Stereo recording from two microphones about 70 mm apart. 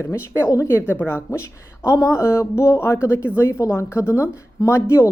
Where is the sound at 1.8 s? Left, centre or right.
Left.